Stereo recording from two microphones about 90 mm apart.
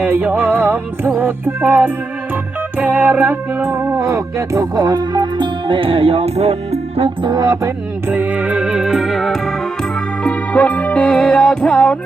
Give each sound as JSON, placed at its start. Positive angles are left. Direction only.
{"t": 0.0, "sound": "music", "side_deg": -20}
{"t": 7.3, "sound": "music", "side_deg": -45}
{"t": 8.0, "sound": "music", "side_deg": -20}
{"t": 10.2, "sound": "music", "side_deg": 15}